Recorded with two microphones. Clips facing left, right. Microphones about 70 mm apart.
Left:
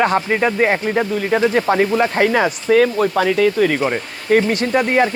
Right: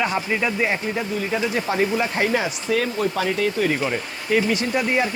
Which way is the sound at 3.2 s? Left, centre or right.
Left.